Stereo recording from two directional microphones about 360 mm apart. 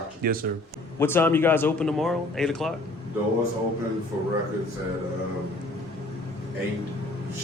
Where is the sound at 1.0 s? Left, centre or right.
Centre.